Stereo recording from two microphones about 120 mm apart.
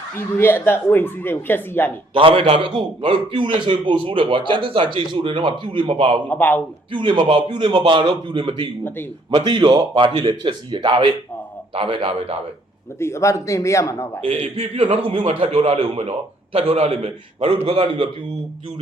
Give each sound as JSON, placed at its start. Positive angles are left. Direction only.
{"t": 0.2, "sound": "speech", "side_deg": 20}
{"t": 2.1, "sound": "a man's voice", "side_deg": -45}
{"t": 6.2, "sound": "speech", "side_deg": 15}
{"t": 6.9, "sound": "a man's voice", "side_deg": -45}
{"t": 13.0, "sound": "a man's voice", "side_deg": 25}
{"t": 14.3, "sound": "a man's voice", "side_deg": -60}